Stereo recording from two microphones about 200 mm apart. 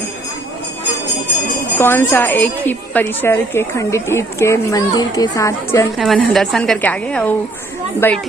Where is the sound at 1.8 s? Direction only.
10° left (ahead or behind).